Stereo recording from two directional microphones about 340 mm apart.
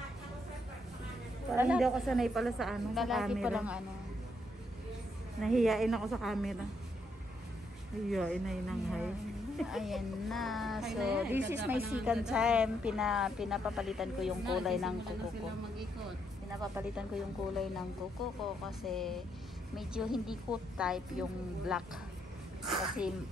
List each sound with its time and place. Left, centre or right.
1.6 s a woman's voice: centre
5.4 s a woman's voice: centre
8.1 s a woman's voice: centre
11.3 s speech: right
11.6 s a woman's voice: centre
16.7 s a woman's voice: centre
22.7 s a woman's voice: centre